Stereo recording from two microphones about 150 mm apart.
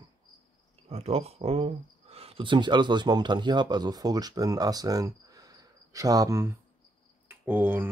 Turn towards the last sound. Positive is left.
turn(degrees=-15)  # may be behind; listen again after turning